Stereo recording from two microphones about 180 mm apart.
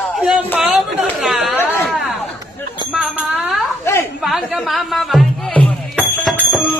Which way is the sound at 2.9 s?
5° right (ahead or behind).